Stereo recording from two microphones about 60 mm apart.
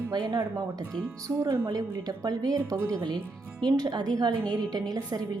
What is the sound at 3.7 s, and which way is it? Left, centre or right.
A woman's voice, right.